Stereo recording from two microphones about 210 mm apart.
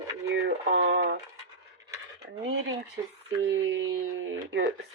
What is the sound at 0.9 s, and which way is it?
Speech, 55° right (ahead or behind).